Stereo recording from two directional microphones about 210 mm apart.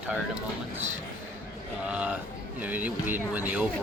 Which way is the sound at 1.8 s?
5° right (ahead or behind).